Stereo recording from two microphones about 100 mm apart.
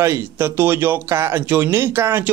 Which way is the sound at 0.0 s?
25° right (ahead or behind).